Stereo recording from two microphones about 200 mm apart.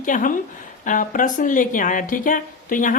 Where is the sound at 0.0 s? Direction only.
40° left (ahead or behind).